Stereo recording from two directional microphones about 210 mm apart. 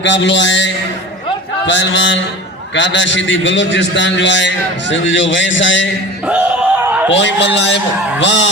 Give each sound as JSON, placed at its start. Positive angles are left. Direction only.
{"t": 0.0, "sound": "a man's voice", "side_deg": 60}
{"t": 6.8, "sound": "a sound", "side_deg": -10}
{"t": 7.1, "sound": "a man's voice", "side_deg": 55}